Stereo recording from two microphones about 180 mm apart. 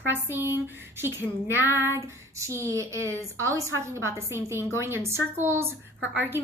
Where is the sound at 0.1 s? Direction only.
10° right (ahead or behind).